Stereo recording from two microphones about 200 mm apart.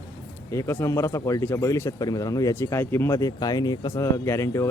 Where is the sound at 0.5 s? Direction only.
15° left (ahead or behind).